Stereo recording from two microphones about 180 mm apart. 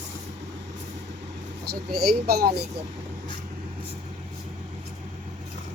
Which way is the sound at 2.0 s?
60° right (ahead or behind).